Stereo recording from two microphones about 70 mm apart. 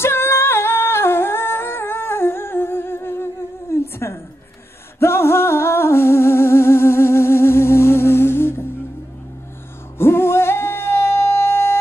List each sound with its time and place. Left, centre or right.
0.0 s humming: left
3.7 s a sound: left
4.9 s music: left
9.9 s singing: left